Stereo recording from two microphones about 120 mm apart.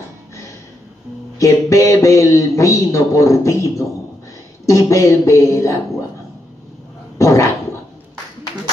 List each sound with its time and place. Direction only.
1.4 s a man's voice: 25° left (ahead or behind)
7.2 s dog: 25° left (ahead or behind)